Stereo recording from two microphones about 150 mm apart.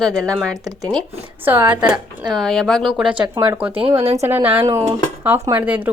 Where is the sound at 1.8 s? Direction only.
30° right (ahead or behind).